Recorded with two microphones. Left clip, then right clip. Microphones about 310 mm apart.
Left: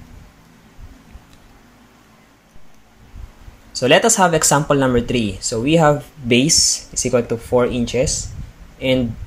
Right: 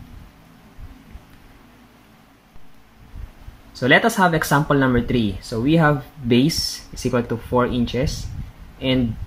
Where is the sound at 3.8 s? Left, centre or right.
Centre.